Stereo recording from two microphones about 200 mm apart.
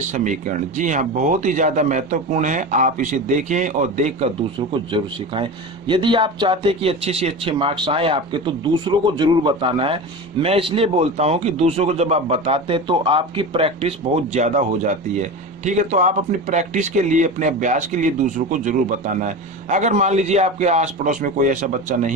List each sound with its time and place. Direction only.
0.1 s speech: 40° right (ahead or behind)